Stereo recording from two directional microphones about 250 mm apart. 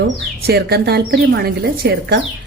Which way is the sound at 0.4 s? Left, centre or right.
Right.